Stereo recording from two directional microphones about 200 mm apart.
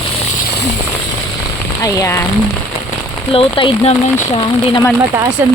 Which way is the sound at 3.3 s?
25° left (ahead or behind).